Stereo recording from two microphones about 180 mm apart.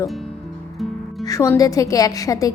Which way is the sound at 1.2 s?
15° left (ahead or behind).